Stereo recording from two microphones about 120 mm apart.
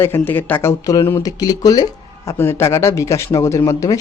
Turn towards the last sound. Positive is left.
turn(degrees=25)  # may be behind; listen again after turning